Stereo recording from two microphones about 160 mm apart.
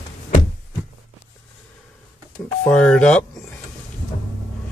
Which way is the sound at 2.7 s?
5° left (ahead or behind).